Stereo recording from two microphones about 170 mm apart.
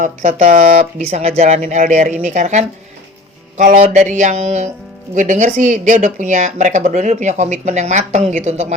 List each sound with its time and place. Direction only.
0.0 s speech: 45° right (ahead or behind)